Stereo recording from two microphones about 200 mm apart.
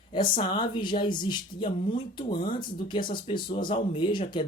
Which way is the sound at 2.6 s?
25° left (ahead or behind).